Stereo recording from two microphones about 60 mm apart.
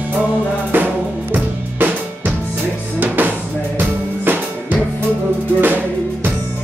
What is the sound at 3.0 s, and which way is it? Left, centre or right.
Music, right.